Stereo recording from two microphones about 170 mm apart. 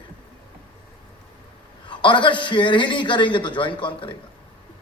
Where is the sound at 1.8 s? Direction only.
30° left (ahead or behind).